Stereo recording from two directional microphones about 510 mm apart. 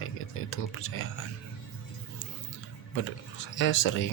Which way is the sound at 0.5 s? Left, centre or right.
Left.